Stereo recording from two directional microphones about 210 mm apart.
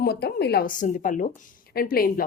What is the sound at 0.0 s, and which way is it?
A woman's voice, 50° left (ahead or behind).